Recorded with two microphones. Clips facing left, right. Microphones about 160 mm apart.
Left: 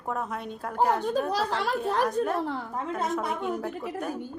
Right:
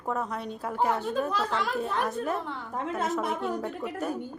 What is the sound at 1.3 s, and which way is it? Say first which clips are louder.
Speech: left 1 dB; 35° left (ahead or behind).